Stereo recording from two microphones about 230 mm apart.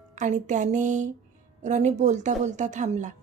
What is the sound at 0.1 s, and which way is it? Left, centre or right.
A woman's voice, right.